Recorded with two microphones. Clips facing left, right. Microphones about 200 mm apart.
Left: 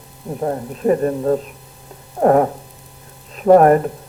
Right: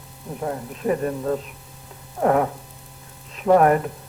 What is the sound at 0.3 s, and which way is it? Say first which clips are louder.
Frying: left 6 dB; 40° left (ahead or behind).